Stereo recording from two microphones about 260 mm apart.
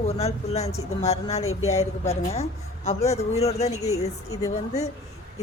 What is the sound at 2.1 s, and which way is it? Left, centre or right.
Speech, left.